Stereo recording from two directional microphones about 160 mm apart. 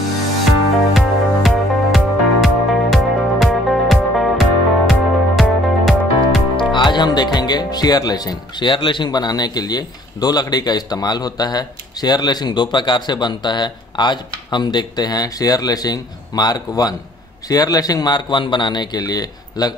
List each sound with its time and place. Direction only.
0.5 s music: centre (ahead or behind)
6.5 s speech: 30° left (ahead or behind)